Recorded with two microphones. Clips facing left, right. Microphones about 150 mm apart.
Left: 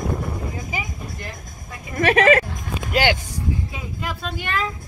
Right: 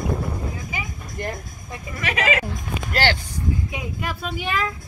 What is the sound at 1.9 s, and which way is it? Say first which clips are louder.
Speech: left 9 dB; 55° left (ahead or behind).